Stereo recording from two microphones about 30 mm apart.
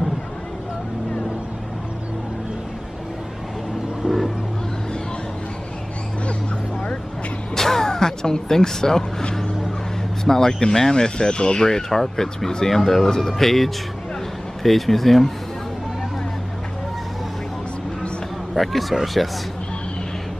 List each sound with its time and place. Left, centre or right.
4.0 s vehicle: centre
7.5 s music: centre
10.2 s speech: centre
11.6 s speech: centre
18.5 s speech: centre